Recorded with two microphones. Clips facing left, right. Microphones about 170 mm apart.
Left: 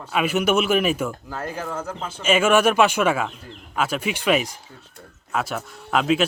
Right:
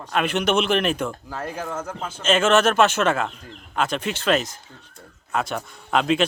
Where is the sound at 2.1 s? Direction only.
10° left (ahead or behind).